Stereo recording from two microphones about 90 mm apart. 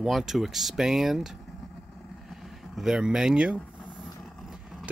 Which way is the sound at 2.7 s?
5° right (ahead or behind).